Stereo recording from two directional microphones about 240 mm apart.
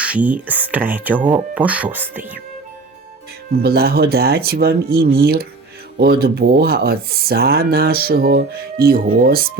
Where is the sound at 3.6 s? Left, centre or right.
Right.